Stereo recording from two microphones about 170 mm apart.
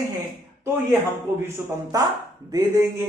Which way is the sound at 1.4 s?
20° right (ahead or behind).